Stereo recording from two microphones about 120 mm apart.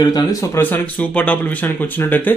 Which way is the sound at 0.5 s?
15° left (ahead or behind).